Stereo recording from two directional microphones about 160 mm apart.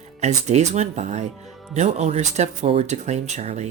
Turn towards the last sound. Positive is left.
turn(degrees=-45)  # may be behind; listen again after turning